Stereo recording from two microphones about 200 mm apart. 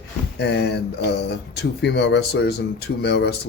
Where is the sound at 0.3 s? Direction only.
55° left (ahead or behind).